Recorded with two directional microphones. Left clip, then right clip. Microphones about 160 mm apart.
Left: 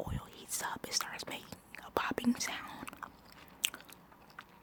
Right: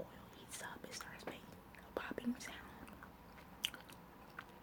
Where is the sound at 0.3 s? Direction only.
45° left (ahead or behind).